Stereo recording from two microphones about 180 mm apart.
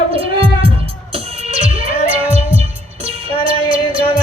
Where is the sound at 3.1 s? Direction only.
30° right (ahead or behind).